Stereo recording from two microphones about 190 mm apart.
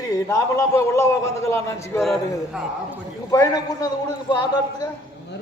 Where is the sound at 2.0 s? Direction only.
Centre (ahead or behind).